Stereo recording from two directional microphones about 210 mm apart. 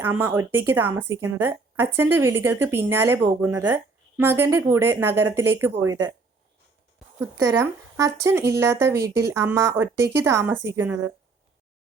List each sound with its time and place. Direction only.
0.0 s a woman's voice: 10° right (ahead or behind)
5.2 s speech: 90° right
5.5 s a woman's voice: 10° right (ahead or behind)
7.2 s a woman's voice: 15° right (ahead or behind)